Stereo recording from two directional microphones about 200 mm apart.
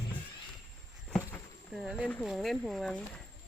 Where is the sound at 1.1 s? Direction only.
5° left (ahead or behind).